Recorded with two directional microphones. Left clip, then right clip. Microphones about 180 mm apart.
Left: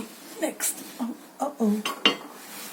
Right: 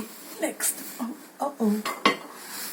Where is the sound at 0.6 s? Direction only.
5° right (ahead or behind).